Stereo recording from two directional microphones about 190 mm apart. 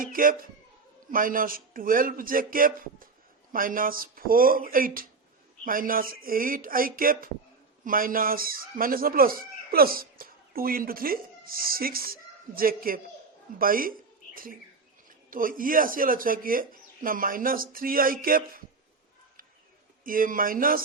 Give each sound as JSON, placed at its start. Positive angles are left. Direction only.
{"t": 0.0, "sound": "speech", "side_deg": -45}
{"t": 15.3, "sound": "speech", "side_deg": -45}
{"t": 20.1, "sound": "speech", "side_deg": -45}